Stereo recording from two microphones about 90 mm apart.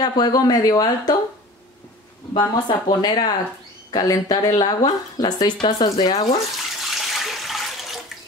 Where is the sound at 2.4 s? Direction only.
55° left (ahead or behind).